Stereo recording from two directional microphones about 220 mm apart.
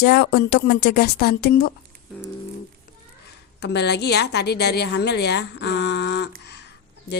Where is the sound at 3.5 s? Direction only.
50° left (ahead or behind).